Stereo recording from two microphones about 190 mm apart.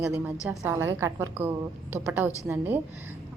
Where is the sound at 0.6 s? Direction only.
15° right (ahead or behind).